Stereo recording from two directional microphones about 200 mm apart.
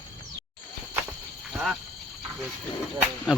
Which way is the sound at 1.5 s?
Centre (ahead or behind).